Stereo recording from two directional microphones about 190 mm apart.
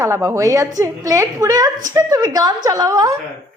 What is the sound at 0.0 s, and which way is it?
A woman's voice, 15° right (ahead or behind).